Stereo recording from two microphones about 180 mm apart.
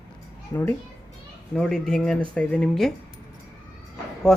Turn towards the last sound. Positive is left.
turn(degrees=5)  # may be behind; listen again after turning